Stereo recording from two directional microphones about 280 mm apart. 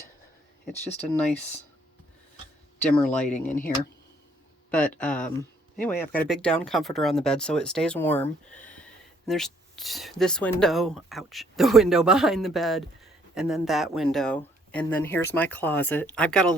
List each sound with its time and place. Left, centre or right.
2.9 s speech: centre
3.2 s speech: left
4.9 s speech: centre